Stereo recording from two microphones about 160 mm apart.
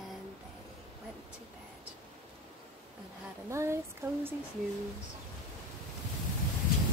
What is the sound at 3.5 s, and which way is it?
Speech, 15° right (ahead or behind).